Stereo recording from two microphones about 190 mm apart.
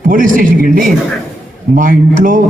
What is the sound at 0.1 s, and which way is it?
A man's voice, 45° right (ahead or behind).